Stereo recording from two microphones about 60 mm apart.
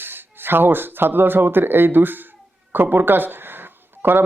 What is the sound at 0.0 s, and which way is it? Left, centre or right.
Speech, right.